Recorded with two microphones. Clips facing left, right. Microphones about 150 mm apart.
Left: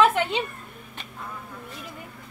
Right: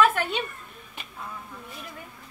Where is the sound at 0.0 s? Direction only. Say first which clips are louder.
Left 2 dB; 20° left (ahead or behind).